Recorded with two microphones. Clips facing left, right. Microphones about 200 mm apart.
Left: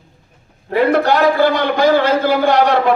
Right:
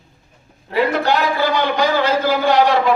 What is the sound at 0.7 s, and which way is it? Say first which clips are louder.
A man's voice: left 4 dB; 55° left (ahead or behind).